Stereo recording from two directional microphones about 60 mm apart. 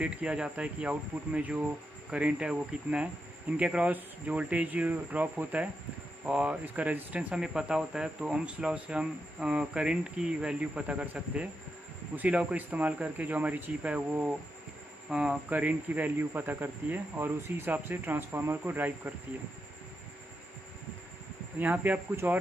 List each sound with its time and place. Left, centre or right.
0.0 s speech: centre
6.6 s speech: right
7.3 s speech: centre; by 14.2 s right
15.0 s speech: centre
15.5 s speech: right
21.5 s speech: right